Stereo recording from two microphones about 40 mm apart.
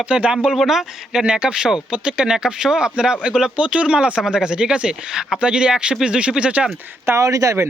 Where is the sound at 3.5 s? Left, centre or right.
Right.